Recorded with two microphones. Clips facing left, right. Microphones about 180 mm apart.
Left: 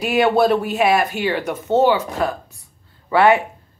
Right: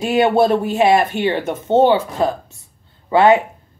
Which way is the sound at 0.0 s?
25° right (ahead or behind).